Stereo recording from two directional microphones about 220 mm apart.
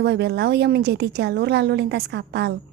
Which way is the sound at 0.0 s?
50° right (ahead or behind).